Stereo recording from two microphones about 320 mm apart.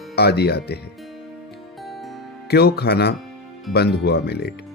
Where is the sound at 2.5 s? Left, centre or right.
Left.